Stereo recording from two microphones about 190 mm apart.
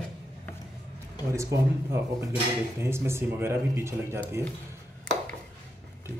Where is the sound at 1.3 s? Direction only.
15° right (ahead or behind).